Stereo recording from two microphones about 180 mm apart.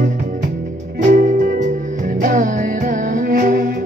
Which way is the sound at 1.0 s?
50° right (ahead or behind).